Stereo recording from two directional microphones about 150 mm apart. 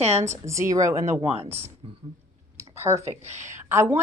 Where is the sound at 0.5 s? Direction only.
20° right (ahead or behind).